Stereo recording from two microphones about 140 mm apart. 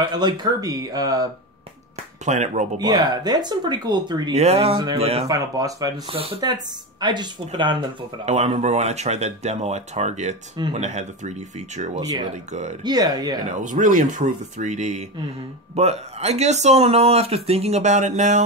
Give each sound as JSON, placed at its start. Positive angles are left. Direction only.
{"t": 0.0, "sound": "speech", "side_deg": -30}
{"t": 2.2, "sound": "speech", "side_deg": -55}
{"t": 2.8, "sound": "speech", "side_deg": -30}
{"t": 4.4, "sound": "speech", "side_deg": -45}
{"t": 5.2, "sound": "speech", "side_deg": -25}
{"t": 8.3, "sound": "speech", "side_deg": -55}
{"t": 11.9, "sound": "speech", "side_deg": -30}
{"t": 13.6, "sound": "speech", "side_deg": -65}